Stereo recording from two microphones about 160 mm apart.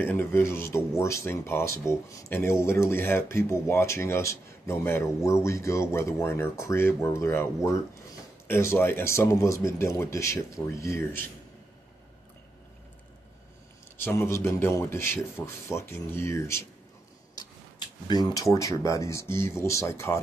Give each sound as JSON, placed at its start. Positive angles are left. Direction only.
{"t": 0.0, "sound": "speech", "side_deg": 15}
{"t": 13.9, "sound": "speech", "side_deg": 15}